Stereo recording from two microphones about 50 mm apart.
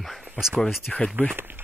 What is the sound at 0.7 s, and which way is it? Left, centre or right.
Speech, centre.